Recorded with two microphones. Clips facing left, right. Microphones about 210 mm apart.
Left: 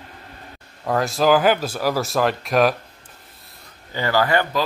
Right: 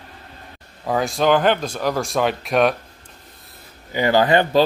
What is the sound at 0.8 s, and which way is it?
Speech, centre (ahead or behind).